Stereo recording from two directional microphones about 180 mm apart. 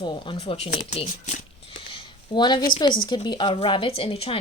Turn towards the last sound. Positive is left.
turn(degrees=30)  # may be behind; listen again after turning